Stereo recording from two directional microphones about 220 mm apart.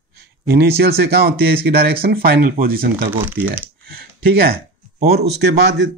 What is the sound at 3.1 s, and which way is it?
Speech, 10° right (ahead or behind).